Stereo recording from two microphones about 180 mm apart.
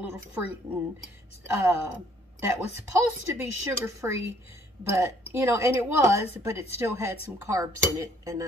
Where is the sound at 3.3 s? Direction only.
15° right (ahead or behind).